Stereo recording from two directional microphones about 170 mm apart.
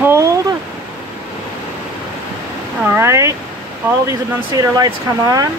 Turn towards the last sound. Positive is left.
turn(degrees=-20)  # may be behind; listen again after turning